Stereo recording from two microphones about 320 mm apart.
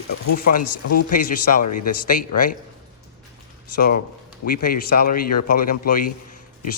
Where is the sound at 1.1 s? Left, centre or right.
Left.